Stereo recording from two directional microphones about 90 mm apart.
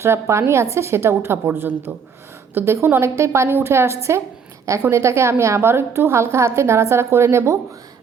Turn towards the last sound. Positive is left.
turn(degrees=-30)  # may be behind; listen again after turning